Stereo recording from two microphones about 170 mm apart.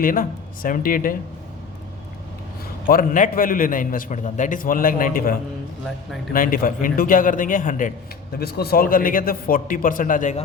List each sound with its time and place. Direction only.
0.0 s speech: 55° left (ahead or behind)
2.8 s a man's voice: 55° left (ahead or behind)